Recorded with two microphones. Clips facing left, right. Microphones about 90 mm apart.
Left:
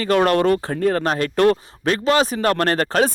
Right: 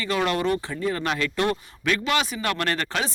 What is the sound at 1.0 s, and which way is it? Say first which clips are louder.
Speech: left 7 dB; 40° left (ahead or behind).